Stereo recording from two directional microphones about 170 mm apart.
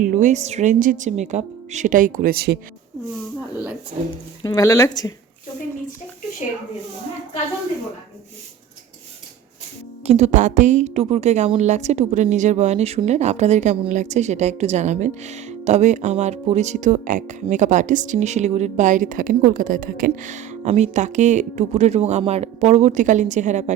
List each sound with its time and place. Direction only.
0.0 s speech: 50° right (ahead or behind); by 2.6 s 65° right (ahead or behind)
4.4 s speech: 20° left (ahead or behind)
10.1 s speech: 40° right (ahead or behind)